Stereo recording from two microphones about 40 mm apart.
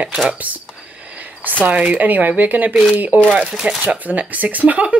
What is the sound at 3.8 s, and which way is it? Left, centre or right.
Speech, right.